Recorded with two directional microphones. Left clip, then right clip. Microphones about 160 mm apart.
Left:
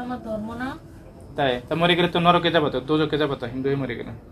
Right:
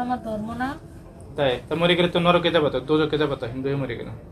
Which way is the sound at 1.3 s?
45° left (ahead or behind).